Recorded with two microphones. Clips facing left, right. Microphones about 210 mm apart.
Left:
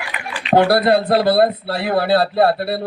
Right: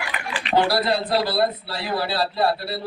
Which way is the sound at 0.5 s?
55° left (ahead or behind).